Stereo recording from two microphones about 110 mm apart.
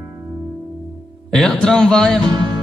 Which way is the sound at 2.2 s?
45° right (ahead or behind).